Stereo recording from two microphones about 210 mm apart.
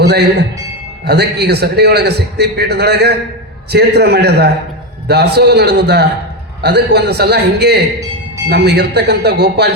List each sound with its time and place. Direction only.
0.0 s a man's voice: 55° right (ahead or behind)